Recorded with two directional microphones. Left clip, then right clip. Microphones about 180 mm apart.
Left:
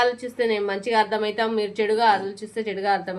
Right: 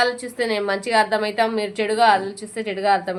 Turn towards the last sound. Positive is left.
turn(degrees=-20)  # may be behind; listen again after turning